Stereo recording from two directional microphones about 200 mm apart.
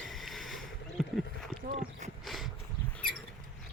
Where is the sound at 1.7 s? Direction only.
45° right (ahead or behind).